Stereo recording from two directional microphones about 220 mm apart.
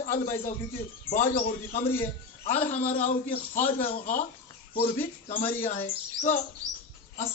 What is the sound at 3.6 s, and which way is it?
Speech, 35° left (ahead or behind).